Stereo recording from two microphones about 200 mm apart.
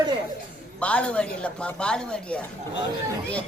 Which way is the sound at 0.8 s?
5° left (ahead or behind).